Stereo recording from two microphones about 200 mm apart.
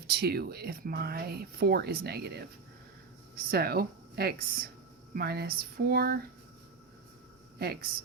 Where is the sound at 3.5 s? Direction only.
50° right (ahead or behind).